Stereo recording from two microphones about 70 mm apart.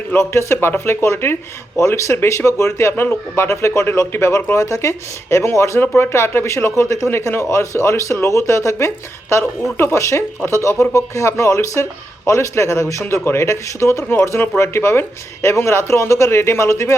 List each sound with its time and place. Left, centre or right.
0.2 s speech: left